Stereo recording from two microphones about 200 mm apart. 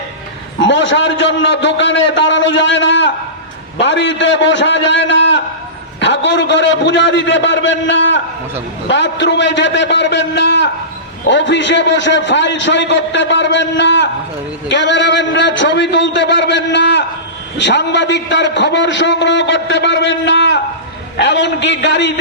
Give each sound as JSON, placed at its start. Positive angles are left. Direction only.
{"t": 0.6, "sound": "a man's voice", "side_deg": 65}